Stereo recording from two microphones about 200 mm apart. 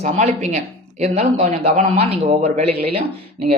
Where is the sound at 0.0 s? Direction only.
35° right (ahead or behind).